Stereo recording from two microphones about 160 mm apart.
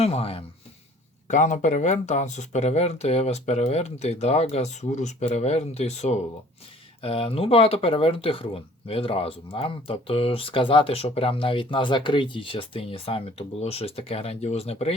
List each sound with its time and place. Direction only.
0.0 s speech: 40° left (ahead or behind)
1.3 s speech: 50° left (ahead or behind)